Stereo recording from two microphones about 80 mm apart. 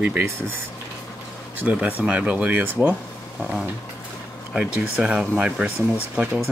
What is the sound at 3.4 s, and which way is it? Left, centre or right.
Speech, centre.